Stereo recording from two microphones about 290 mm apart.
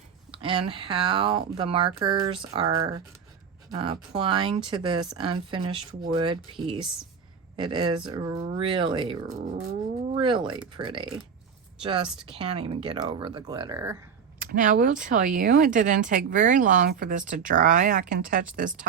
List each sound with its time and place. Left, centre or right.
0.7 s speech: centre
14.3 s speech: right